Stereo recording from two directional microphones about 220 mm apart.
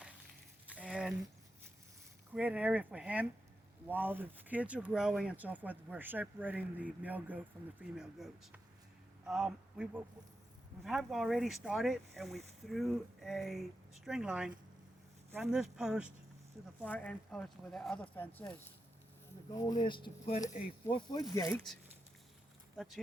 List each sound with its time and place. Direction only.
0.7 s a sound: 5° right (ahead or behind)
2.3 s speech: 5° right (ahead or behind); by 20.7 s 30° left (ahead or behind)
20.9 s speech: 20° left (ahead or behind)